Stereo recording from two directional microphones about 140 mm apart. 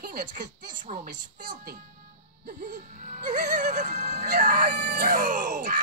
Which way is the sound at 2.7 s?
60° right (ahead or behind).